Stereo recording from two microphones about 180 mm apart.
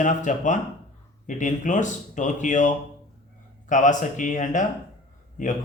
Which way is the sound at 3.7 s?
45° left (ahead or behind).